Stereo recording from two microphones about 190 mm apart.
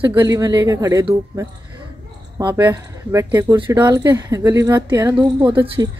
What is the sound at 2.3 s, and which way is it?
Speech, 20° right (ahead or behind).